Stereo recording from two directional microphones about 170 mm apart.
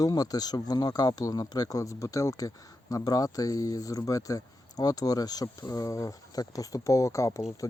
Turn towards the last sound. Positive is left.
turn(degrees=20)  # may be behind; listen again after turning